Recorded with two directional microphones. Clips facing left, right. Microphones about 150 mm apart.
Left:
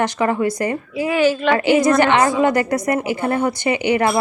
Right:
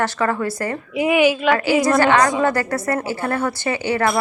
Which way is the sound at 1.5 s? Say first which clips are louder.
Left 2 dB; 20° left (ahead or behind).